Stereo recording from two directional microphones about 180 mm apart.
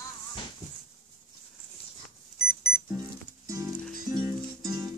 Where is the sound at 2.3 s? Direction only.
60° left (ahead or behind).